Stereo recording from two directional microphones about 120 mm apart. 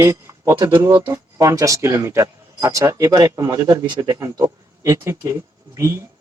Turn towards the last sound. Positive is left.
turn(degrees=-25)  # may be behind; listen again after turning